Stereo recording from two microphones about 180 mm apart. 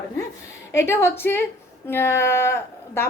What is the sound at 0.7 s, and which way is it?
A woman's voice, 15° left (ahead or behind).